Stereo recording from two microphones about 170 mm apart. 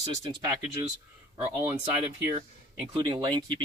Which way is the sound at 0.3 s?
20° right (ahead or behind).